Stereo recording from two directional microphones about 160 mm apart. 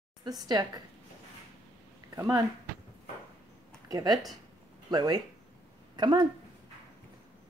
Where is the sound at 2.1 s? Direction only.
20° right (ahead or behind).